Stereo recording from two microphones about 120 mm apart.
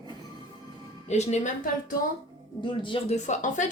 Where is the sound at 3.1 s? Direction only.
85° left.